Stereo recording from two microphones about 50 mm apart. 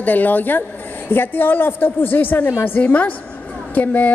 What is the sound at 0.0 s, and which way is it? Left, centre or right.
A woman's voice, left.